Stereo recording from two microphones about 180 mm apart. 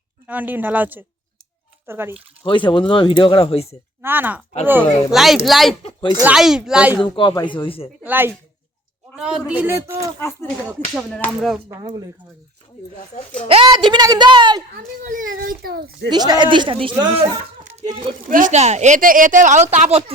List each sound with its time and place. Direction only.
0.3 s a man's voice: 10° right (ahead or behind)
2.4 s speech: 25° left (ahead or behind)
4.0 s a man's voice: 10° right (ahead or behind)
5.8 s speech: 25° left (ahead or behind)
6.2 s speech: 5° right (ahead or behind)
7.0 s speech: 25° left (ahead or behind)
8.0 s a man's voice: 10° right (ahead or behind)
10.9 s speech: centre (ahead or behind)
11.7 s a woman's voice: 20° right (ahead or behind)
13.1 s speech: 40° left (ahead or behind)
13.5 s a woman's voice: 25° right (ahead or behind)
15.0 s a woman's voice: 45° right (ahead or behind)
16.0 s a woman's voice: 20° right (ahead or behind)
18.3 s a woman's voice: 45° right (ahead or behind)